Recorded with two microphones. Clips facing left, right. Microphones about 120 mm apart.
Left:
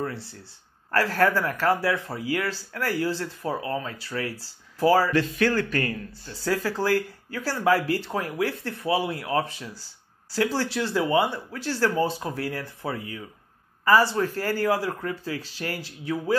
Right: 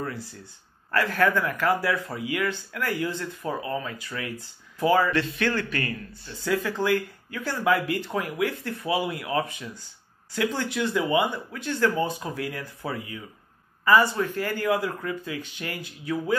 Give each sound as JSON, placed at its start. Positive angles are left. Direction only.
{"t": 0.0, "sound": "speech", "side_deg": 30}